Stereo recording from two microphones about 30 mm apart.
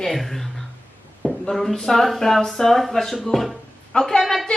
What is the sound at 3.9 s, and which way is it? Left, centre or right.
Speech, left.